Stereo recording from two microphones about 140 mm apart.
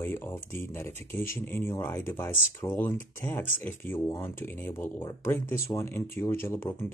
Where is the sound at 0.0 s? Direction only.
15° left (ahead or behind).